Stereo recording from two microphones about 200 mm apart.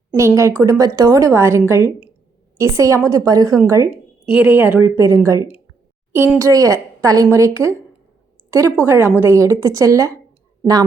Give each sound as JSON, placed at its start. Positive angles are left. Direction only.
{"t": 0.2, "sound": "a woman's voice", "side_deg": -15}